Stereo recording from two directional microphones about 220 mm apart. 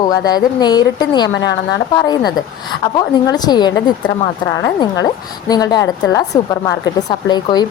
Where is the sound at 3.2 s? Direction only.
20° left (ahead or behind).